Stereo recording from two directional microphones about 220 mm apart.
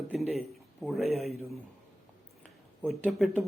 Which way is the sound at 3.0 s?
Centre (ahead or behind).